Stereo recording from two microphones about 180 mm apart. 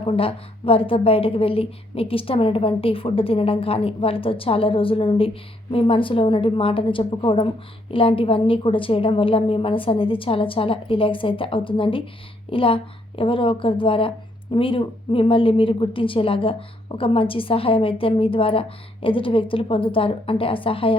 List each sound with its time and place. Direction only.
0.0 s a woman's voice: 30° left (ahead or behind)